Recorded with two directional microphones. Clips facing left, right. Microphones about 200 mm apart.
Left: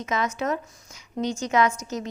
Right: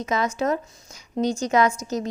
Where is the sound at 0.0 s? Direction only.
35° right (ahead or behind).